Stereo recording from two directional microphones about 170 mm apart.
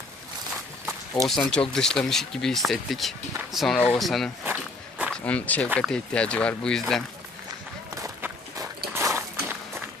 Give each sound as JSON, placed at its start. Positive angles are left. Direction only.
{"t": 1.2, "sound": "speech", "side_deg": 0}
{"t": 4.4, "sound": "walk", "side_deg": -10}
{"t": 5.1, "sound": "speech", "side_deg": 10}
{"t": 7.9, "sound": "walk", "side_deg": -20}
{"t": 9.0, "sound": "a sound", "side_deg": -15}